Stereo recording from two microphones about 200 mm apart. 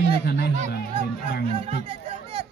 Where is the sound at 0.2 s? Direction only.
55° left (ahead or behind).